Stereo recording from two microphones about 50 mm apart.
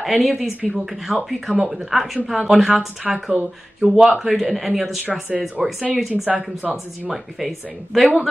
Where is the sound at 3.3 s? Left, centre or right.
Right.